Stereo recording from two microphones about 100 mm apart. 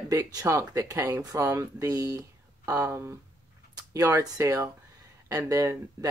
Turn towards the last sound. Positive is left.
turn(degrees=-35)  # may be behind; listen again after turning